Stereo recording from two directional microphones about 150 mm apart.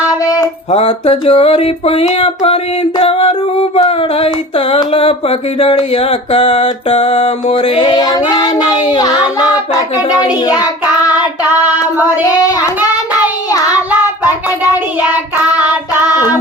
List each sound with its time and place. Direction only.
0.7 s female singing: 40° left (ahead or behind)
8.3 s child singing: 25° left (ahead or behind)
12.2 s child singing: 25° left (ahead or behind)
15.5 s child singing: 10° right (ahead or behind)